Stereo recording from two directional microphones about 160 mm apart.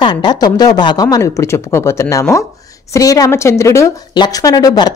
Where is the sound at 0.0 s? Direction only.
30° left (ahead or behind).